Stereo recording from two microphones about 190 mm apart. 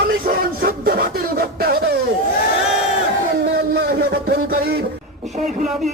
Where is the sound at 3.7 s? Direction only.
50° right (ahead or behind).